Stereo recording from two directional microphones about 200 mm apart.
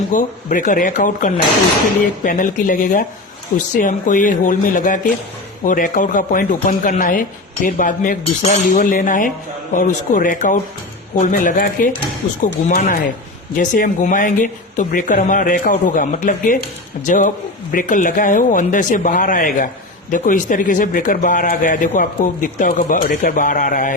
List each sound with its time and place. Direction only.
0.1 s a man's voice: 40° left (ahead or behind)